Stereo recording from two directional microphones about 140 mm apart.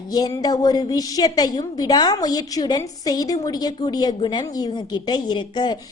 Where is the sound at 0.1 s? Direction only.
30° left (ahead or behind).